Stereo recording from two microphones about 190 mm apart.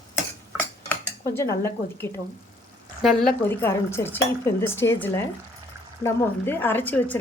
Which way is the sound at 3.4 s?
15° left (ahead or behind).